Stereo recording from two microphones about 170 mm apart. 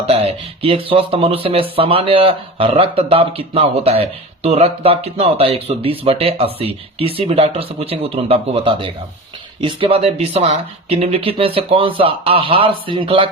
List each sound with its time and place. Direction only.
0.0 s speech: 35° right (ahead or behind)